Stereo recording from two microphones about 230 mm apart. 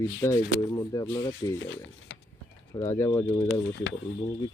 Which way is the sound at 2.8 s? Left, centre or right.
Centre.